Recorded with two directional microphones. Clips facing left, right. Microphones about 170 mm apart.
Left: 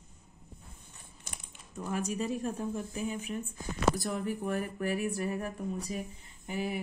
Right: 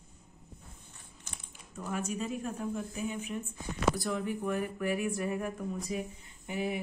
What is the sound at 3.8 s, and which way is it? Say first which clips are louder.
A woman's voice: left 1 dB; 40° left (ahead or behind).